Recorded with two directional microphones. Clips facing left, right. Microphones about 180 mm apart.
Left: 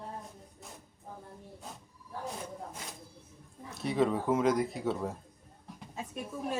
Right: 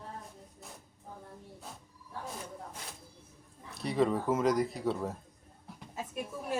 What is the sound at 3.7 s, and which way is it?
Speech, centre (ahead or behind).